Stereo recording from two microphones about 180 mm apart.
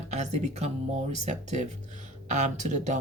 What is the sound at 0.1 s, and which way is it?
Speech, 40° right (ahead or behind).